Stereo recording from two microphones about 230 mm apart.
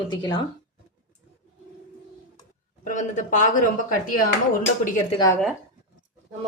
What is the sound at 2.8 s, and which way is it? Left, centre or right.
Speech, left.